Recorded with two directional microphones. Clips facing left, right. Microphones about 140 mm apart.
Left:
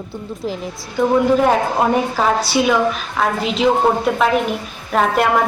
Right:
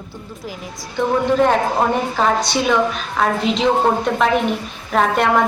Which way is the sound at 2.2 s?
5° left (ahead or behind).